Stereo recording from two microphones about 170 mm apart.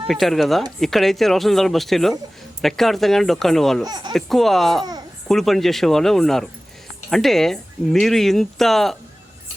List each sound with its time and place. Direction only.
0.1 s speech: centre (ahead or behind)
3.8 s speech: 25° right (ahead or behind)
4.1 s speech: centre (ahead or behind)
4.8 s speech: 25° right (ahead or behind)
5.3 s speech: centre (ahead or behind)